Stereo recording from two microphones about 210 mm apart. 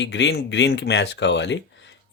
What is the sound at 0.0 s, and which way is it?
Speech, 60° left (ahead or behind).